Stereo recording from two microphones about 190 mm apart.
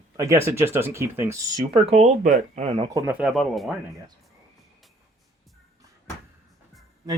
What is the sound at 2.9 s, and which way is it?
Speech, 10° right (ahead or behind).